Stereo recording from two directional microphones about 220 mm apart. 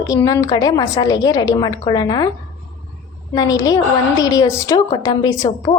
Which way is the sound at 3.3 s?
15° left (ahead or behind).